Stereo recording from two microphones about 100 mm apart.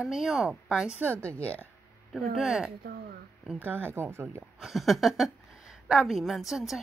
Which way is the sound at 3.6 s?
20° right (ahead or behind).